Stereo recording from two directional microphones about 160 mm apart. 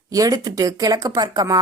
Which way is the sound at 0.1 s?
20° right (ahead or behind).